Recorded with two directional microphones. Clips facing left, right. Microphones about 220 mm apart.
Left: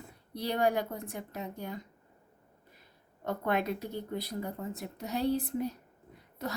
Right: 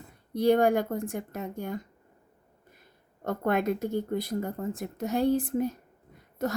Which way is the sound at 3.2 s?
50° right (ahead or behind).